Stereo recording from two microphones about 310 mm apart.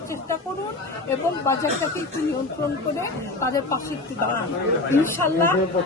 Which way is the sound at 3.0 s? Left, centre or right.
Centre.